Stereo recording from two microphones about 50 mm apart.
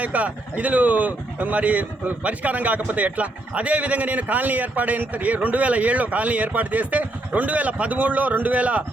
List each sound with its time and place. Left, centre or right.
0.0 s speech: right